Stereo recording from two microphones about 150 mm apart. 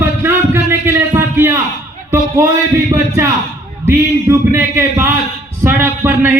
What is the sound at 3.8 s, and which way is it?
A man's voice, 15° right (ahead or behind).